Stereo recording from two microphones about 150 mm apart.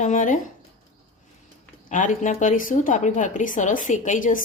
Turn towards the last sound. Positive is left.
turn(degrees=60)  # may be behind; listen again after turning